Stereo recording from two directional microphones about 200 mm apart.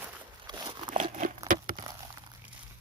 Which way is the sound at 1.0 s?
35° right (ahead or behind).